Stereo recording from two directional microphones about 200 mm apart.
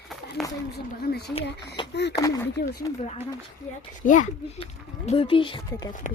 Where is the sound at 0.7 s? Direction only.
50° left (ahead or behind).